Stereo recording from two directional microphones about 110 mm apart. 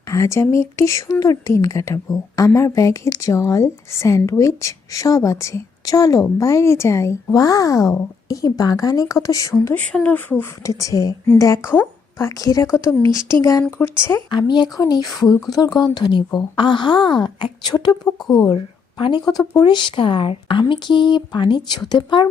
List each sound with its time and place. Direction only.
0.1 s a woman's voice: 25° left (ahead or behind)
9.7 s speech: 10° left (ahead or behind)
10.6 s a woman's voice: 30° left (ahead or behind)
14.3 s a woman's voice: 45° left (ahead or behind)